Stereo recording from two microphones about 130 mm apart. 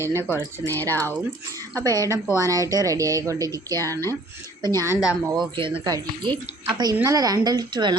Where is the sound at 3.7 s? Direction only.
20° left (ahead or behind).